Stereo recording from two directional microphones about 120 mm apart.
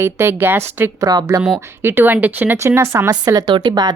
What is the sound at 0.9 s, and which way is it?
Speech, 30° right (ahead or behind).